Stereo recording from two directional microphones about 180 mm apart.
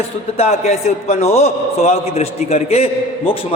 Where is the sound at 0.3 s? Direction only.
35° left (ahead or behind).